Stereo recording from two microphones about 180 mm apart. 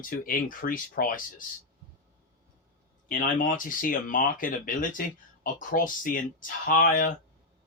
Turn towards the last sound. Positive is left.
turn(degrees=50)  # may be behind; listen again after turning